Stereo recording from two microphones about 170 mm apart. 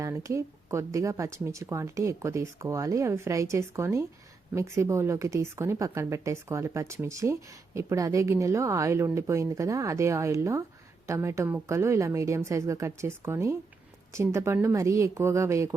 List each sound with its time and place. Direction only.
0.0 s speech: 20° right (ahead or behind)